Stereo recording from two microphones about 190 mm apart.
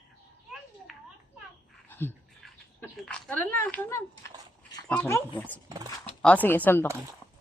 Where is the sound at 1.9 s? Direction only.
10° left (ahead or behind).